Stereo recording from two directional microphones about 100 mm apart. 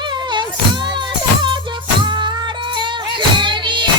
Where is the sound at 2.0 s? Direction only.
50° right (ahead or behind).